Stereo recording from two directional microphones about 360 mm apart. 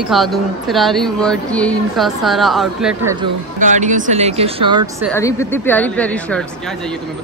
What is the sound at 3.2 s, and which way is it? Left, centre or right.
Speech, centre.